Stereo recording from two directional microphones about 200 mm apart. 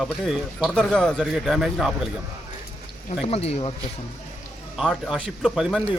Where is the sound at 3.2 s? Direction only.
30° left (ahead or behind).